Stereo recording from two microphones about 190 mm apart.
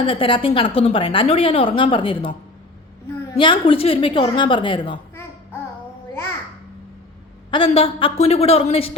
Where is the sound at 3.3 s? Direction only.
25° left (ahead or behind).